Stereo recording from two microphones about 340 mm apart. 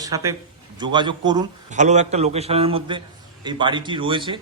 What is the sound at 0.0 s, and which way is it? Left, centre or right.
A man's voice, centre.